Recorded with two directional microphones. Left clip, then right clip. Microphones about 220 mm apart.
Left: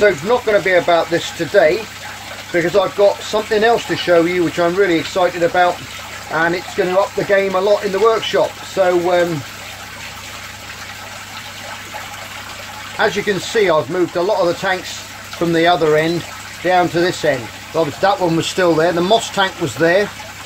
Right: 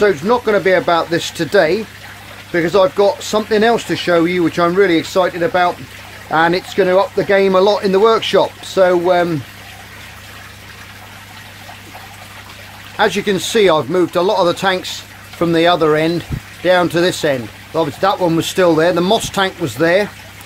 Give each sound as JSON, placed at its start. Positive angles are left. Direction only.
{"t": 0.0, "sound": "speech", "side_deg": -45}
{"t": 12.9, "sound": "speech", "side_deg": -35}